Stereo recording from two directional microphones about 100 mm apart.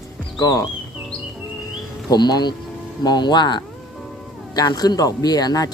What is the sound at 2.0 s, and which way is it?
Speech, 45° left (ahead or behind).